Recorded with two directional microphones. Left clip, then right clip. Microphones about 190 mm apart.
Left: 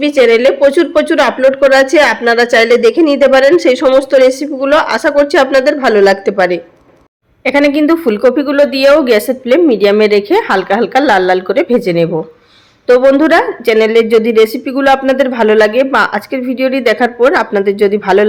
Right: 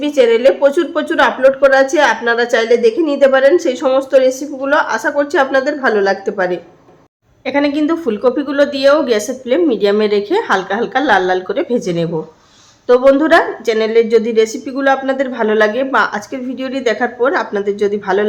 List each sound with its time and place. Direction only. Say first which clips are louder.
0.0 s a woman's voice: left 3 dB; 20° left (ahead or behind)